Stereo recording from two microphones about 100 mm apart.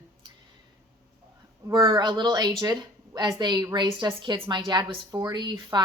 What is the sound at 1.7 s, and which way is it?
A woman's voice, 45° right (ahead or behind).